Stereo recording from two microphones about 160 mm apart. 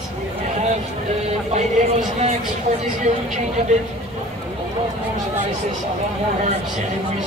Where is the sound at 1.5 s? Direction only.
45° right (ahead or behind).